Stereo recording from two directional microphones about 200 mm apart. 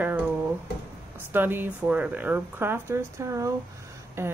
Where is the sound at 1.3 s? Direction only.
10° right (ahead or behind).